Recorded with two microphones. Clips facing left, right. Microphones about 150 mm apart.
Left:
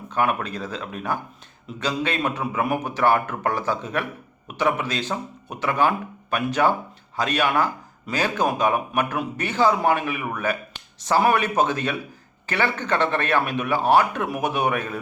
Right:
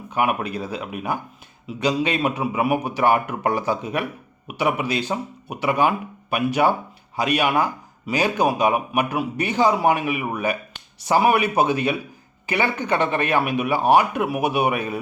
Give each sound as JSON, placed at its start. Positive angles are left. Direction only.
{"t": 0.1, "sound": "a man's voice", "side_deg": -15}